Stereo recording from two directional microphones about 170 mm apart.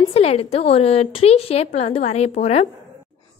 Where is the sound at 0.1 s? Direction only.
35° left (ahead or behind).